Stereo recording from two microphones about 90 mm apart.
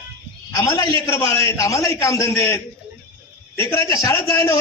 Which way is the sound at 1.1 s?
35° left (ahead or behind).